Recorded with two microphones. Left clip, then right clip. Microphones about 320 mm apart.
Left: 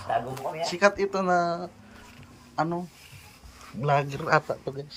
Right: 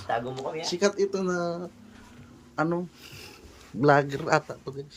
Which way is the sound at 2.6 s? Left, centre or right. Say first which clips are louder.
Even; centre.